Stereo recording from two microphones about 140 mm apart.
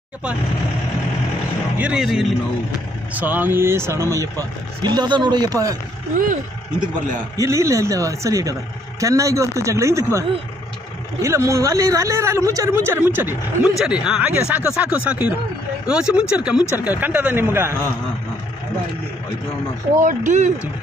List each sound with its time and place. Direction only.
1.8 s speech: 5° right (ahead or behind); by 5.8 s 25° right (ahead or behind)
6.1 s speech: 65° right (ahead or behind)
7.3 s speech: 20° right (ahead or behind)
11.1 s speech: 20° right (ahead or behind)
20.1 s speech: 65° right (ahead or behind)